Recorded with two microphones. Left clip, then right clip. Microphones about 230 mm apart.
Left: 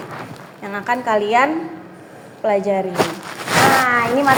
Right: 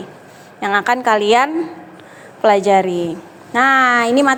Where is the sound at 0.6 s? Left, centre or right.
Right.